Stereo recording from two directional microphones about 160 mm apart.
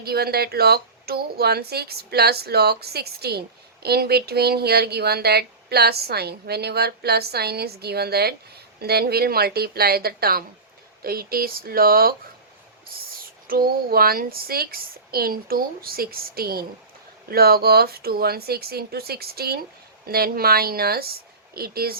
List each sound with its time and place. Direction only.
0.0 s speech: 75° right (ahead or behind)
13.5 s speech: 65° right (ahead or behind)